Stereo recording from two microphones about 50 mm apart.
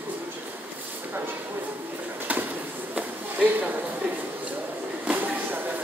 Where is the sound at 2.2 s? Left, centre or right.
Right.